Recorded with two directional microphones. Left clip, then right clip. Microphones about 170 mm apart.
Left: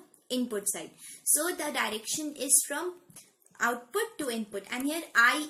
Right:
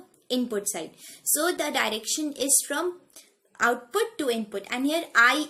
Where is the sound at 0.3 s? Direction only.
30° right (ahead or behind).